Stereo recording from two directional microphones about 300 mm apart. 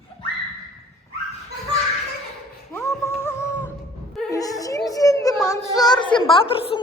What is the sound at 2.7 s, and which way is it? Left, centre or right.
Music, centre.